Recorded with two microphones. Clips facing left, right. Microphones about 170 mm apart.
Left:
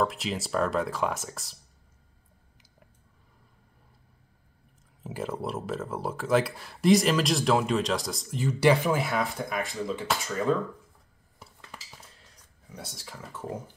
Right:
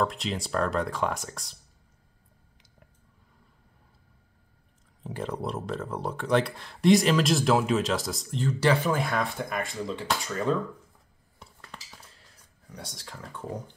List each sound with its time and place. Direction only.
0.0 s speech: 5° left (ahead or behind)
5.0 s speech: 5° left (ahead or behind)
11.3 s dishes: 5° left (ahead or behind)
12.6 s speech: 5° left (ahead or behind)